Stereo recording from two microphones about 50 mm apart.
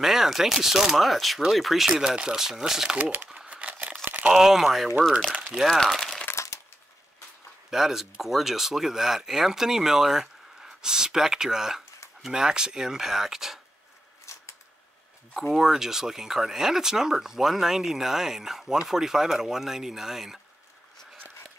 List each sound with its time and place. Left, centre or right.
0.0 s speech: centre
3.3 s a sound: right
4.3 s speech: centre
5.3 s crumpling: right
6.3 s crushing: left
7.7 s speech: centre
14.2 s scissors: left
15.3 s speech: centre